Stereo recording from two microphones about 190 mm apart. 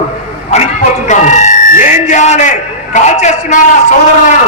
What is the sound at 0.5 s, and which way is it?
Buzzer, 40° left (ahead or behind).